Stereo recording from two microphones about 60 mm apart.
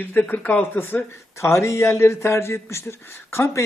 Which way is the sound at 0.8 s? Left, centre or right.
Left.